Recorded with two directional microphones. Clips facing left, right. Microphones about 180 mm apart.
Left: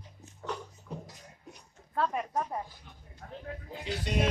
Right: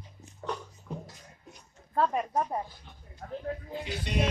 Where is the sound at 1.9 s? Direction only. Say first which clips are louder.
Right 3 dB; 35° right (ahead or behind).